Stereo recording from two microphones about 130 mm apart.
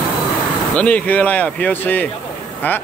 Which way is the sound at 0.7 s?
10° left (ahead or behind).